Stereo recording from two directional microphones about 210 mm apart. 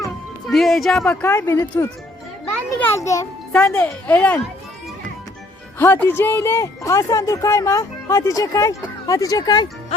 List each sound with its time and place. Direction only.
0.4 s speech: centre (ahead or behind)
1.3 s speech: 15° left (ahead or behind)
5.8 s speech: 10° left (ahead or behind)